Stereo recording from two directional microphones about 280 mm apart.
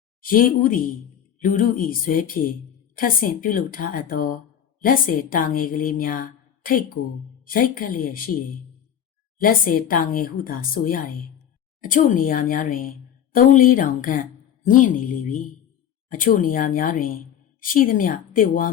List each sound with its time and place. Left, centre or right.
0.2 s a woman's voice: left
9.4 s a woman's voice: left
14.6 s a sound: left
16.0 s speech: left